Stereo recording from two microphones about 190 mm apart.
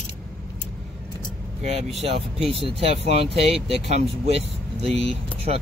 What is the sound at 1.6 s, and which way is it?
Speech, 35° right (ahead or behind).